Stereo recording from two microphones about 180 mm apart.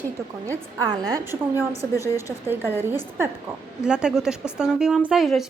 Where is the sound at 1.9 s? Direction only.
15° left (ahead or behind).